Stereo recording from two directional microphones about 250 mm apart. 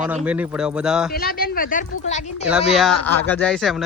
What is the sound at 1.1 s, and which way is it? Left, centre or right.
Speech, left.